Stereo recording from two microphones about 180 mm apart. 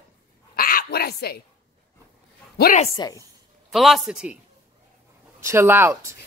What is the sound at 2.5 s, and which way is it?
Speech, 55° left (ahead or behind).